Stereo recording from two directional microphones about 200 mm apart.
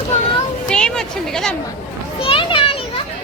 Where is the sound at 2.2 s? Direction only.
25° left (ahead or behind).